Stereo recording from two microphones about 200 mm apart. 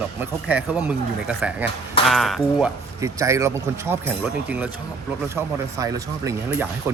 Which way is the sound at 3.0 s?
15° right (ahead or behind).